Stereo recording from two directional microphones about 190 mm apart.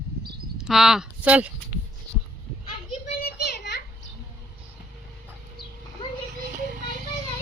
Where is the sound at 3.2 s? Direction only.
60° left (ahead or behind).